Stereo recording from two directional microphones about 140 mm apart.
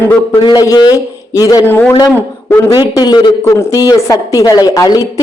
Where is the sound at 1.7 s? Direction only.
15° left (ahead or behind).